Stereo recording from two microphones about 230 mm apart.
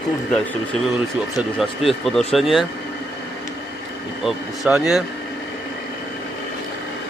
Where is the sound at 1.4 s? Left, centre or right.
Centre.